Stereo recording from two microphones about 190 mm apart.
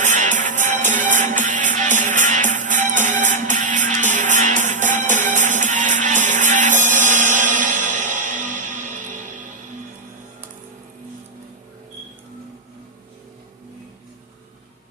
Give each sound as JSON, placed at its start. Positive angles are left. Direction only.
{"t": 0.0, "sound": "music", "side_deg": -40}